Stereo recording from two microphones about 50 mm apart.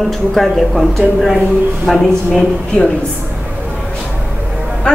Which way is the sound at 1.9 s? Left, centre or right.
Centre.